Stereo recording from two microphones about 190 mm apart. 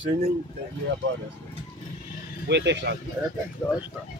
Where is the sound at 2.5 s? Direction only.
65° right (ahead or behind).